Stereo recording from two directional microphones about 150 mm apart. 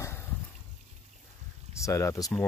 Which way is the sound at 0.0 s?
15° left (ahead or behind).